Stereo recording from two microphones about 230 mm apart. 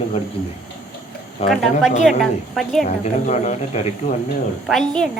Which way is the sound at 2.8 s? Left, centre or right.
Left.